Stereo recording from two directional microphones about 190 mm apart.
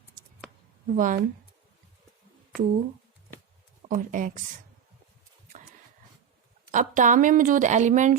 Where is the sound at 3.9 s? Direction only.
45° right (ahead or behind).